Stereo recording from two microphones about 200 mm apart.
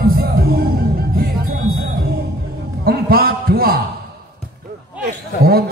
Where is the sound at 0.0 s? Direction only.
50° right (ahead or behind).